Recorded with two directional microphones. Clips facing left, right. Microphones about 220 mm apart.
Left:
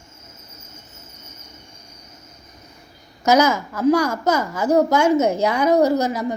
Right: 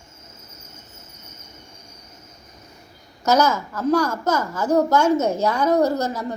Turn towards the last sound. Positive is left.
turn(degrees=10)  # may be behind; listen again after turning